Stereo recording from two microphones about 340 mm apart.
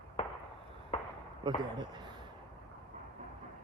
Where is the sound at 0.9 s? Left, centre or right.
Centre.